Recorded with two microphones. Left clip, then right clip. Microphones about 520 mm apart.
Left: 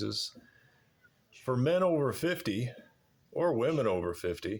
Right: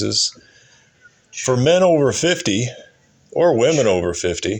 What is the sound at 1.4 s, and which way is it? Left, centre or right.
Speech, left.